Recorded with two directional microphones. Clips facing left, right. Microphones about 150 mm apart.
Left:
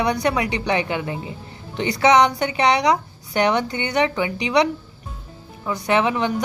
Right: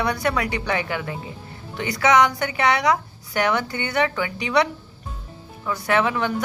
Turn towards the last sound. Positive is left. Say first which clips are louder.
# left 2 dB
turn(degrees=20)  # may be behind; listen again after turning